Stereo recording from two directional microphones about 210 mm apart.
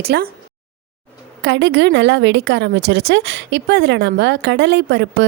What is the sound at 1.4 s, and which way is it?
A woman's voice, 60° right (ahead or behind).